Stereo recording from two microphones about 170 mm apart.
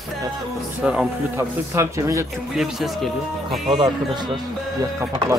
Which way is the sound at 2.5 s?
Centre (ahead or behind).